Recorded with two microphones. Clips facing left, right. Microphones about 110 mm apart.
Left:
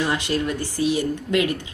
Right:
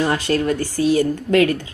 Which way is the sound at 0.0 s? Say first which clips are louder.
Right 4 dB; 40° right (ahead or behind).